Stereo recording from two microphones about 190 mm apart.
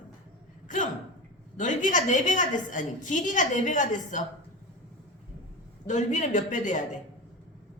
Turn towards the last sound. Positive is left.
turn(degrees=40)  # may be behind; listen again after turning